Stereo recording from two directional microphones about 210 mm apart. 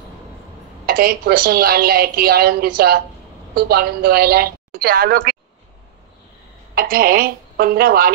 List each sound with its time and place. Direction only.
0.8 s a woman's voice: 45° right (ahead or behind)
6.7 s a woman's voice: 45° right (ahead or behind)